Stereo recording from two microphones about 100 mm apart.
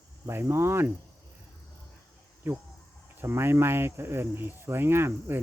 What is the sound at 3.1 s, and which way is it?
Speech, 25° right (ahead or behind).